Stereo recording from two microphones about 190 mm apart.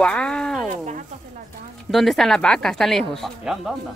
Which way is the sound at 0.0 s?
5° left (ahead or behind).